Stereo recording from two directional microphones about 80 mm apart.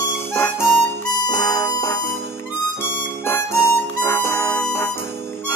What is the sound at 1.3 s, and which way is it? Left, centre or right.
Music, left.